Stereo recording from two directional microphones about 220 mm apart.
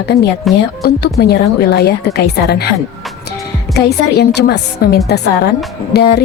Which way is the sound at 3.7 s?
50° left (ahead or behind).